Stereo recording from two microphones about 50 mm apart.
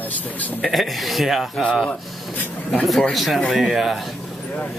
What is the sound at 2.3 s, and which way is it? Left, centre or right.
Speech, left.